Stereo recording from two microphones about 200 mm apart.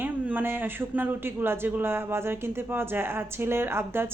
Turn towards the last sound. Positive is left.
turn(degrees=-10)  # may be behind; listen again after turning